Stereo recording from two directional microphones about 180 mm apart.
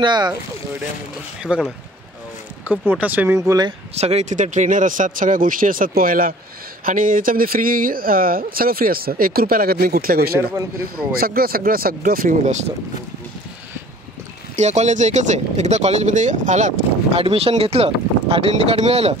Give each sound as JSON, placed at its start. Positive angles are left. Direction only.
{"t": 0.0, "sound": "speech", "side_deg": -25}
{"t": 1.4, "sound": "speech", "side_deg": -5}
{"t": 3.3, "sound": "speech", "side_deg": -20}
{"t": 3.9, "sound": "speech", "side_deg": -35}
{"t": 14.5, "sound": "speech", "side_deg": -40}